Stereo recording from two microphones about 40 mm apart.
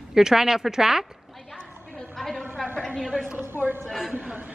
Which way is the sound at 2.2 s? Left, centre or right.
Centre.